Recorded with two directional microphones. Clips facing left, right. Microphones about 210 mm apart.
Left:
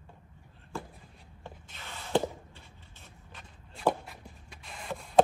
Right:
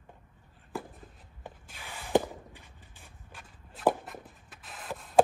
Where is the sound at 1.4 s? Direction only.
10° right (ahead or behind).